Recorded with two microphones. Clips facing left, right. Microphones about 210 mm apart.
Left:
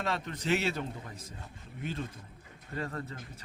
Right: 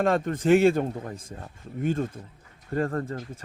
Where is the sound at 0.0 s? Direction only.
50° right (ahead or behind).